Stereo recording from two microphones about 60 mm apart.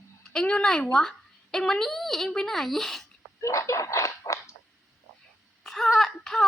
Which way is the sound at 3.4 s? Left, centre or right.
Left.